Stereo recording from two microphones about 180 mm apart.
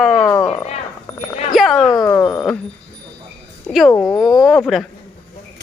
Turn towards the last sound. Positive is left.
turn(degrees=0)  # may be behind; listen again after turning